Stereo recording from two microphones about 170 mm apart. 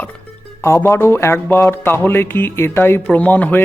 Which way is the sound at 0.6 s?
15° left (ahead or behind).